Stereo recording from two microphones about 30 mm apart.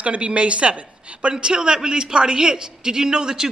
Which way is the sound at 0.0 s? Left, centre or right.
Right.